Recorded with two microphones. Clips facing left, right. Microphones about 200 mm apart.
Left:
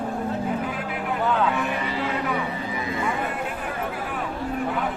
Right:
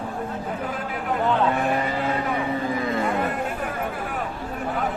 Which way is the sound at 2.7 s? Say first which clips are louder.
Right 4 dB; 55° right (ahead or behind).